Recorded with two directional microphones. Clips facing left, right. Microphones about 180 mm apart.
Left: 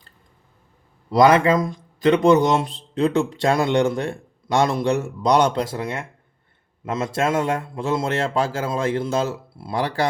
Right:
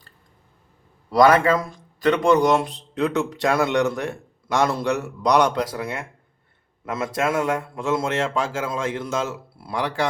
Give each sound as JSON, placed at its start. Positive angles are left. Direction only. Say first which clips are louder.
{"t": 1.1, "sound": "a man's voice", "louder": "left 1 dB", "side_deg": 25}